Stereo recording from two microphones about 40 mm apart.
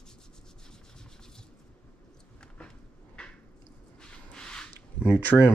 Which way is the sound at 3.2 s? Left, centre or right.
Left.